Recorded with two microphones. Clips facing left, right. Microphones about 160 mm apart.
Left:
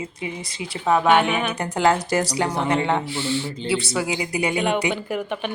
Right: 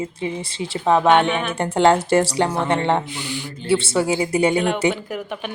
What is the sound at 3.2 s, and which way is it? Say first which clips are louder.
Speech: left 5 dB; 15° right (ahead or behind).